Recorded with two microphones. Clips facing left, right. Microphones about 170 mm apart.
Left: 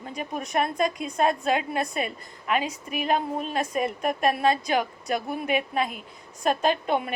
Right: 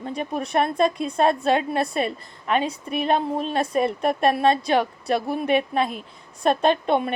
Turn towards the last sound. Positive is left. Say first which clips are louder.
# right 4 dB
turn(degrees=-30)  # may be behind; listen again after turning